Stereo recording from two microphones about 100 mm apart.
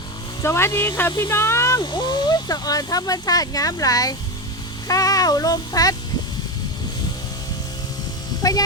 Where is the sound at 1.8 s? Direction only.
50° left (ahead or behind).